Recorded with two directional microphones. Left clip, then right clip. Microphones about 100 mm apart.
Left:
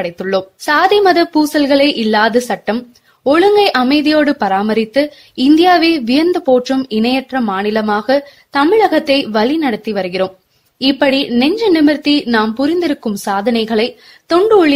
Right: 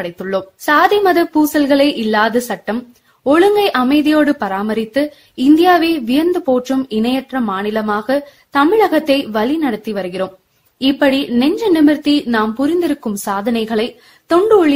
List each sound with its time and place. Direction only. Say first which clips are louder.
0.7 s a woman's voice: left 1 dB; 30° left (ahead or behind)
13.6 s a woman's voice: left 3 dB; 30° left (ahead or behind)